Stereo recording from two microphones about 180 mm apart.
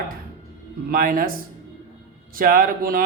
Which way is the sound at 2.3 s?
50° right (ahead or behind).